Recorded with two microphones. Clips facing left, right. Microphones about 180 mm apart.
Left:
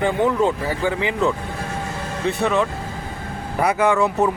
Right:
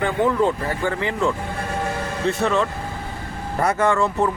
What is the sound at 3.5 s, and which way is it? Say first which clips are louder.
Speech: left 1 dB; 10° left (ahead or behind).